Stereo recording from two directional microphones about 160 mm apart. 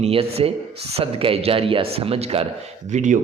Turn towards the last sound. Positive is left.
turn(degrees=-50)  # may be behind; listen again after turning